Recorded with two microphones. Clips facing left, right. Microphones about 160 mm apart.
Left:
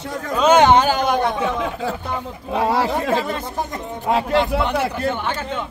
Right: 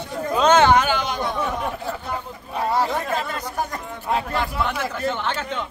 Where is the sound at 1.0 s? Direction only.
55° left (ahead or behind); by 1.9 s 90° left.